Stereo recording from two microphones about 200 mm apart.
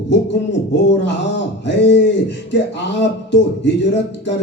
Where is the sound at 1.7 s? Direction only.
60° left (ahead or behind).